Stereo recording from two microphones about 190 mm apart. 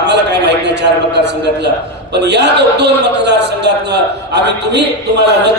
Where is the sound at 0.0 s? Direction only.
65° right (ahead or behind).